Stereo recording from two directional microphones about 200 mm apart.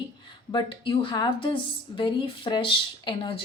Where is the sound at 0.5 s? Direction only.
25° left (ahead or behind).